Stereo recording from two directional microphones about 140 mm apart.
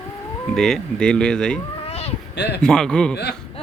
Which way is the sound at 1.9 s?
45° left (ahead or behind).